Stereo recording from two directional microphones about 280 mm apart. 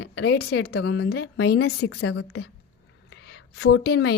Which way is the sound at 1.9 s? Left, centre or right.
Left.